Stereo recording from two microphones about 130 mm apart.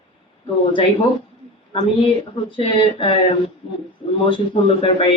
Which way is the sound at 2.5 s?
40° left (ahead or behind).